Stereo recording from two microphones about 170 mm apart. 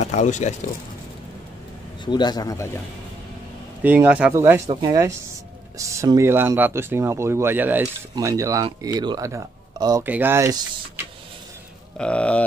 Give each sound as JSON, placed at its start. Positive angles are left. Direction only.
{"t": 0.0, "sound": "speech", "side_deg": 45}
{"t": 2.0, "sound": "a man's voice", "side_deg": 25}
{"t": 3.8, "sound": "speech", "side_deg": -10}
{"t": 12.0, "sound": "speech", "side_deg": 5}